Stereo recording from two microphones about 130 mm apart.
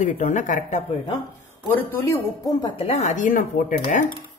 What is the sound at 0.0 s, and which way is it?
Speech, 70° left (ahead or behind).